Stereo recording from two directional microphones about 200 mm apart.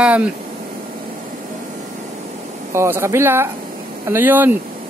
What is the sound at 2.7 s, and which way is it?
Speech, 15° right (ahead or behind).